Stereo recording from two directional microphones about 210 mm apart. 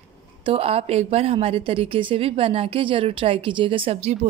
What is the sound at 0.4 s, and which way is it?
A woman's voice, 25° right (ahead or behind).